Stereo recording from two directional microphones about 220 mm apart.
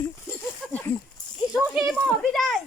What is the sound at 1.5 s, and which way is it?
Children playing, centre (ahead or behind).